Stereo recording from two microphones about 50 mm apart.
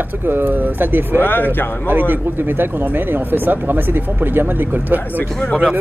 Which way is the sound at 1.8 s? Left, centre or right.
Right.